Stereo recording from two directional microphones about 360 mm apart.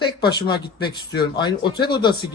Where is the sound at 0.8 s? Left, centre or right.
Left.